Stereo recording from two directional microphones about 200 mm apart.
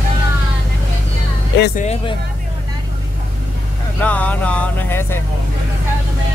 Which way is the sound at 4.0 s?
5° left (ahead or behind).